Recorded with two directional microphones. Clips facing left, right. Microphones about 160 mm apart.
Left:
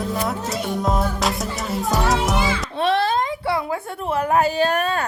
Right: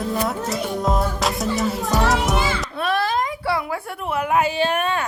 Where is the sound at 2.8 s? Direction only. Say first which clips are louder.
Left 3 dB; 25° left (ahead or behind).